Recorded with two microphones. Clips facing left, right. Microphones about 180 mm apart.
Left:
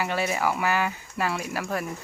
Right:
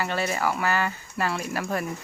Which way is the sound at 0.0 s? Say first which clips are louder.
Even; 10° left (ahead or behind).